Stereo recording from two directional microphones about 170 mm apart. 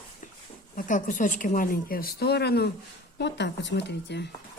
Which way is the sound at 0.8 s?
50° left (ahead or behind).